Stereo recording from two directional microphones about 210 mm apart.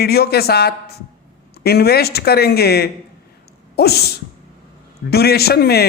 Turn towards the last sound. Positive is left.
turn(degrees=50)  # may be behind; listen again after turning